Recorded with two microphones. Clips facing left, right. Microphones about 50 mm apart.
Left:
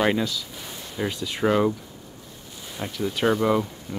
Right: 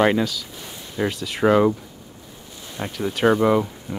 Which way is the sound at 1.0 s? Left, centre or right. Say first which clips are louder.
Right 4 dB; centre.